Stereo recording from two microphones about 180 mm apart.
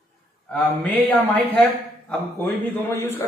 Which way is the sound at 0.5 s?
10° left (ahead or behind).